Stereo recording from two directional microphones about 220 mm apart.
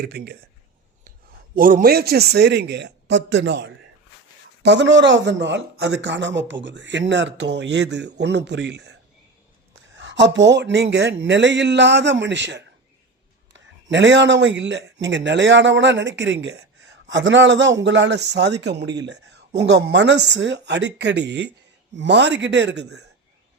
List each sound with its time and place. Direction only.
0.0 s a man's voice: 45° right (ahead or behind)
1.5 s a man's voice: 40° right (ahead or behind)
13.9 s a man's voice: 55° right (ahead or behind)